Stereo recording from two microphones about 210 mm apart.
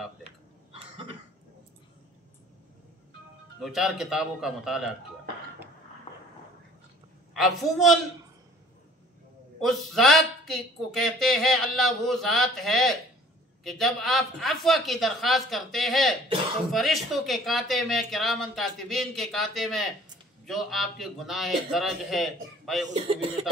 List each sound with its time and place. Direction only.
3.6 s speech: centre (ahead or behind)
6.1 s a sound: 30° left (ahead or behind)
7.3 s speech: centre (ahead or behind)
9.6 s speech: centre (ahead or behind)
22.8 s speech: 30° right (ahead or behind)